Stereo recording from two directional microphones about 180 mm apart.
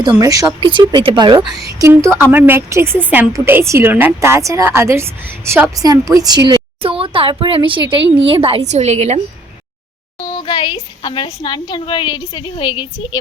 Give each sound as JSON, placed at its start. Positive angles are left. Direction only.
{"t": 0.2, "sound": "speech", "side_deg": -20}
{"t": 1.8, "sound": "a woman's voice", "side_deg": -15}
{"t": 6.5, "sound": "a woman's voice", "side_deg": -30}
{"t": 10.2, "sound": "a woman's voice", "side_deg": 25}